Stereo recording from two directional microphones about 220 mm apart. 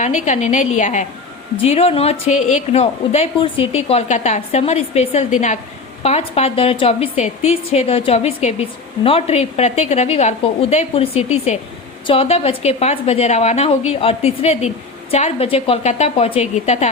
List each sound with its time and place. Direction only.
0.0 s a woman's voice: 35° left (ahead or behind)